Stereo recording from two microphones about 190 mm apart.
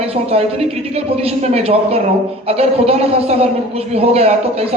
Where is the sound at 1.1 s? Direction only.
30° right (ahead or behind).